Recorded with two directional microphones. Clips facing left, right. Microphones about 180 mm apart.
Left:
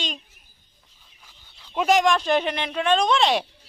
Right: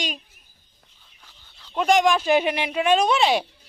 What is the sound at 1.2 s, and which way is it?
Speech, 10° left (ahead or behind).